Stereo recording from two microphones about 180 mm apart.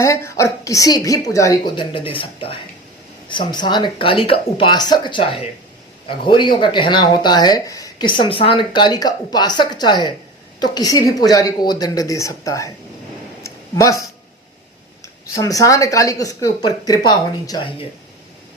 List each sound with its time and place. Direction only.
0.0 s speech: 15° left (ahead or behind)
13.4 s a sound: 20° left (ahead or behind)
15.4 s speech: 20° left (ahead or behind)